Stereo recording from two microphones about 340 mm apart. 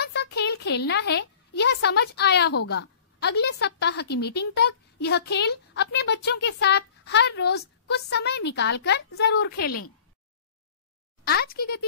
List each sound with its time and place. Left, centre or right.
0.0 s a child's voice: left
11.2 s a woman's voice: left